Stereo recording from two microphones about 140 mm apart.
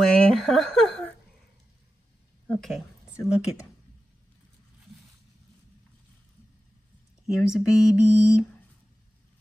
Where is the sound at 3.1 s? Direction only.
20° left (ahead or behind).